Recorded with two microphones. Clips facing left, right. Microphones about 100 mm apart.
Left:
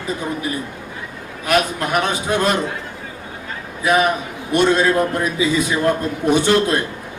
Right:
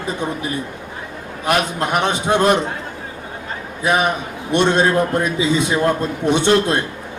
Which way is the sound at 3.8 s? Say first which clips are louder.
Left 1 dB; 30° right (ahead or behind).